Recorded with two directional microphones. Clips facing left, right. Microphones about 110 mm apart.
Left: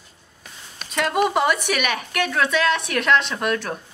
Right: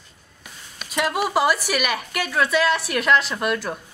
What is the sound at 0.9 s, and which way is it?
A woman's voice, 5° right (ahead or behind).